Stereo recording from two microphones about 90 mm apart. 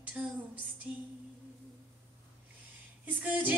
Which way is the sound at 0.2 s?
15° right (ahead or behind).